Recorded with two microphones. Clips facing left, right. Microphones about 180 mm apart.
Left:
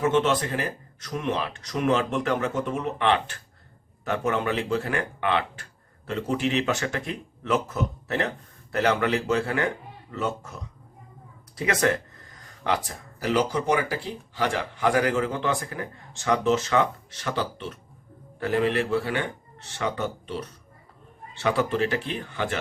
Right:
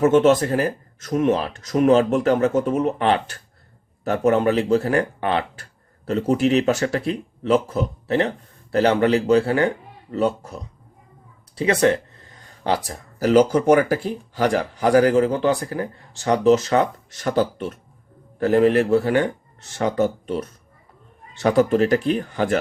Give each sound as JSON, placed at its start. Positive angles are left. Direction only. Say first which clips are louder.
{"t": 0.0, "sound": "speech", "louder": "right 7 dB", "side_deg": -45}